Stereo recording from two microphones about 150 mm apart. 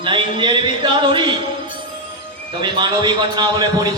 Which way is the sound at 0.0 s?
35° right (ahead or behind).